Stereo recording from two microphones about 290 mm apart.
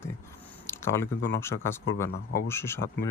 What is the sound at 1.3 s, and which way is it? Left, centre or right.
A man's voice, centre.